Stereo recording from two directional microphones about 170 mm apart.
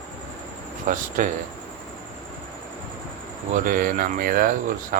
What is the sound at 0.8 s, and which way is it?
Speech, 50° right (ahead or behind).